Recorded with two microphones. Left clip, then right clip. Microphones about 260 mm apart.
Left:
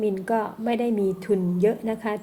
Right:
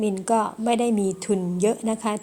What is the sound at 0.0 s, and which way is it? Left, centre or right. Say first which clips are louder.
A woman's voice: right 2 dB; right.